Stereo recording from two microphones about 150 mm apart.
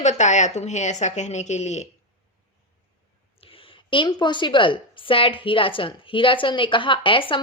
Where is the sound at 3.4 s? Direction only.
35° left (ahead or behind).